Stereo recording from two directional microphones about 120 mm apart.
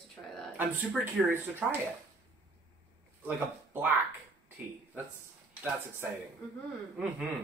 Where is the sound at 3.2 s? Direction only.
15° right (ahead or behind).